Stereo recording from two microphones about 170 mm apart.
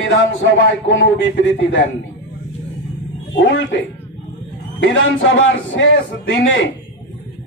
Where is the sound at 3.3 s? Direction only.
90° left.